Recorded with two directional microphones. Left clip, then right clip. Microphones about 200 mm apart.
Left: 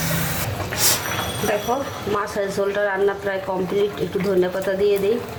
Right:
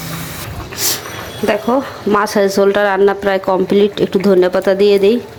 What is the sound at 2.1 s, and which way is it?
Speech, 45° right (ahead or behind).